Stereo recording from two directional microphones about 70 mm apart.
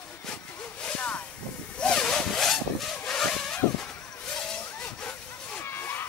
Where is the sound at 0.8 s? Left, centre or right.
Centre.